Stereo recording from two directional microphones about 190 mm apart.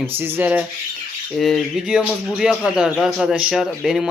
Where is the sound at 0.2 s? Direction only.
10° right (ahead or behind).